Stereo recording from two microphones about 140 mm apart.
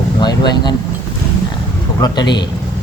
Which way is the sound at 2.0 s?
30° left (ahead or behind).